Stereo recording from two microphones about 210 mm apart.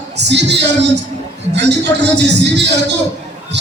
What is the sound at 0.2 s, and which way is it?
Music, 55° right (ahead or behind).